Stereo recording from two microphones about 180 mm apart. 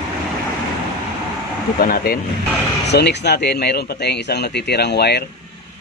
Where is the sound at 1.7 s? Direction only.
55° left (ahead or behind).